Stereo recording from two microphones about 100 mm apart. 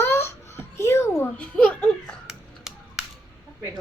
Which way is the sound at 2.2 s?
5° right (ahead or behind).